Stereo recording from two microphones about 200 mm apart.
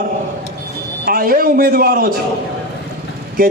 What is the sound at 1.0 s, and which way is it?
A man's voice, 45° right (ahead or behind).